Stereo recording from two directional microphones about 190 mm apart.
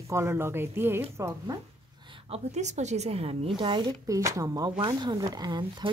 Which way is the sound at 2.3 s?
35° right (ahead or behind).